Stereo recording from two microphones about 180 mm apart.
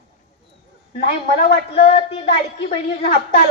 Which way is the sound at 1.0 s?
50° left (ahead or behind).